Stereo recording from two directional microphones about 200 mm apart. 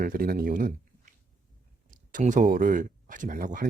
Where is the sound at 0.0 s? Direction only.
45° right (ahead or behind).